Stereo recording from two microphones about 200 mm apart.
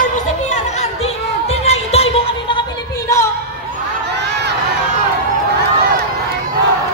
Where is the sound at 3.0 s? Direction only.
15° left (ahead or behind).